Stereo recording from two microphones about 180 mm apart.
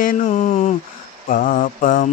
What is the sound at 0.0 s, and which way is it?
Mantra, 45° left (ahead or behind).